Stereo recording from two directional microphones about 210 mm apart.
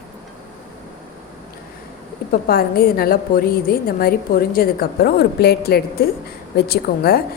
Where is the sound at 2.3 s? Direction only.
45° left (ahead or behind).